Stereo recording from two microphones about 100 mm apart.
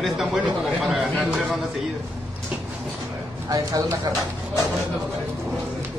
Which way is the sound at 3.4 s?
35° right (ahead or behind).